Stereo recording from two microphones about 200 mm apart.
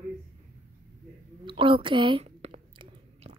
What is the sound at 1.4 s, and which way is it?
Whispering, 25° right (ahead or behind).